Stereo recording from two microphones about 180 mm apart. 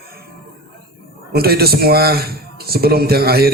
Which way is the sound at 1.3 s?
60° right (ahead or behind).